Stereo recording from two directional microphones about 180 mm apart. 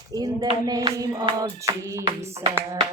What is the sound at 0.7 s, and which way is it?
Hands, 20° right (ahead or behind).